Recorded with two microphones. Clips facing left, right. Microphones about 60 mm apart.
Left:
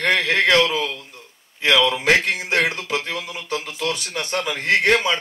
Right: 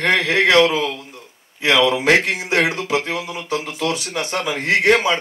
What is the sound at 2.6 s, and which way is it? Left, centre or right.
A man's voice, right.